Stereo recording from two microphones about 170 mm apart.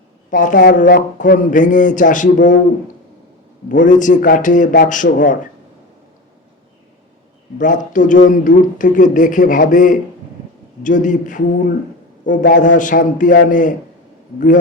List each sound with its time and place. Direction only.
0.3 s speech: 50° left (ahead or behind)
3.7 s speech: 50° left (ahead or behind)
7.6 s speech: 50° left (ahead or behind)